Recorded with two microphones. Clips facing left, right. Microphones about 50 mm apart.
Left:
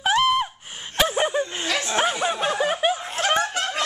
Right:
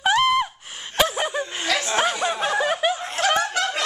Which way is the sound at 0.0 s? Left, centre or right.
Centre.